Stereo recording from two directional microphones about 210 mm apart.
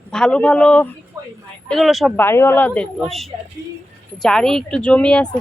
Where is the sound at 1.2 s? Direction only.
15° right (ahead or behind).